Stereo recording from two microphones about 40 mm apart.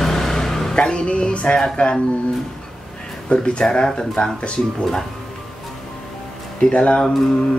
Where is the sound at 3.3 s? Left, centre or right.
Left.